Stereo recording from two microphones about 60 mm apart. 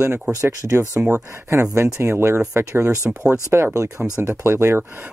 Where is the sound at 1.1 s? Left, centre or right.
Right.